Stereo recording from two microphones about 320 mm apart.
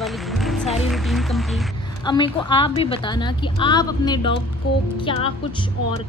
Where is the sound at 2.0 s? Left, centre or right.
Centre.